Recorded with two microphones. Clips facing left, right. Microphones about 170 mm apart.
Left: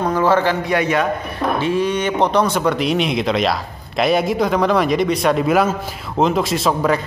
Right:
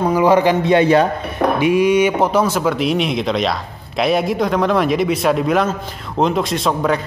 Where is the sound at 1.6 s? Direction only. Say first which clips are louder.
Right 7 dB; 10° right (ahead or behind).